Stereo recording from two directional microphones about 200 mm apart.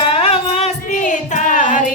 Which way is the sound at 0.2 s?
30° left (ahead or behind).